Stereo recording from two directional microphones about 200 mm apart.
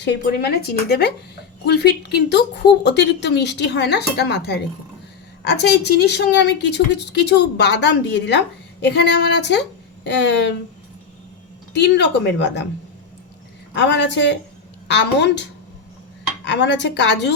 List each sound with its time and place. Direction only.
0.0 s a woman's voice: 60° left (ahead or behind)
11.7 s a woman's voice: 60° left (ahead or behind)
13.7 s a woman's voice: 60° left (ahead or behind)